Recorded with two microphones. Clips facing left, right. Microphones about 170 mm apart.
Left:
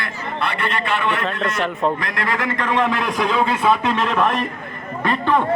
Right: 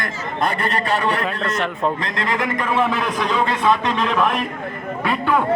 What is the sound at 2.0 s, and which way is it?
Speech, 25° right (ahead or behind).